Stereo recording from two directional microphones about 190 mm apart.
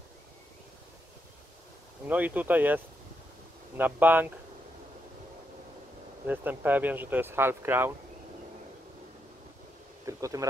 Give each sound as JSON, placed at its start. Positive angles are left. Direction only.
{"t": 2.0, "sound": "speech", "side_deg": -10}
{"t": 6.2, "sound": "speech", "side_deg": -10}
{"t": 10.0, "sound": "speech", "side_deg": -15}